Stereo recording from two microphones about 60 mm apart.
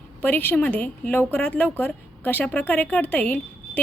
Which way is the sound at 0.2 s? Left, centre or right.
Left.